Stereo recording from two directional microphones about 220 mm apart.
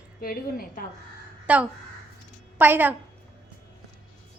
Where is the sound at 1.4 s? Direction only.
5° right (ahead or behind).